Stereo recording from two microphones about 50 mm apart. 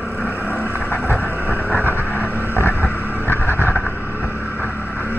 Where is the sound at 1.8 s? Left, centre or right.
Right.